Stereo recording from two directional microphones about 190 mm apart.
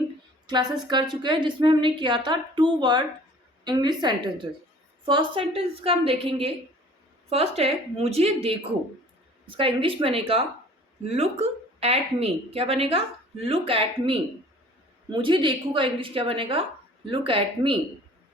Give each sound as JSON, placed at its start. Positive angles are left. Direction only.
{"t": 0.4, "sound": "a woman's voice", "side_deg": -25}
{"t": 9.6, "sound": "a woman's voice", "side_deg": -30}